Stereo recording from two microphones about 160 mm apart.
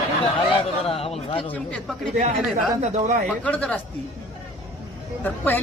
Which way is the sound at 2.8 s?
50° right (ahead or behind).